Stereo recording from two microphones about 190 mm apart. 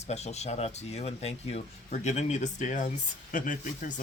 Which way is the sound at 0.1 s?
35° left (ahead or behind).